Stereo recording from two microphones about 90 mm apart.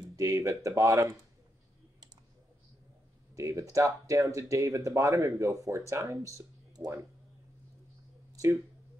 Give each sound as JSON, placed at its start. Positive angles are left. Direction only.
{"t": 0.1, "sound": "speech", "side_deg": -35}
{"t": 3.3, "sound": "speech", "side_deg": -40}
{"t": 8.3, "sound": "a sound", "side_deg": -40}